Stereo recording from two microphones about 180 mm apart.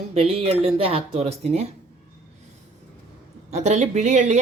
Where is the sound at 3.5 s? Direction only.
40° right (ahead or behind).